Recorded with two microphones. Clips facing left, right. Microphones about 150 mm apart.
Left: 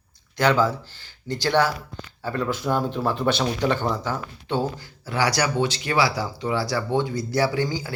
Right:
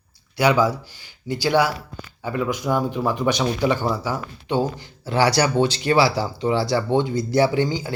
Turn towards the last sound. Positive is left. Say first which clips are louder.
# right 4 dB
turn(degrees=-25)  # may be behind; listen again after turning